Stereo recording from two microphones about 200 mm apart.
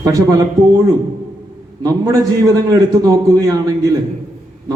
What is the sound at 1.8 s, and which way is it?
A man's voice, 15° right (ahead or behind).